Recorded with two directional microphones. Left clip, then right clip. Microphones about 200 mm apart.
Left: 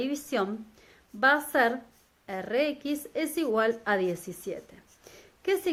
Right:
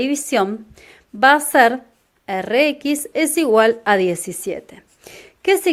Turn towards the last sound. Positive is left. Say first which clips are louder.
# right 12 dB
turn(degrees=-30)  # may be behind; listen again after turning